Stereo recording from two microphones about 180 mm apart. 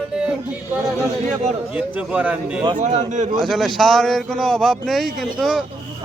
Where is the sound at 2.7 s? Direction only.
40° right (ahead or behind).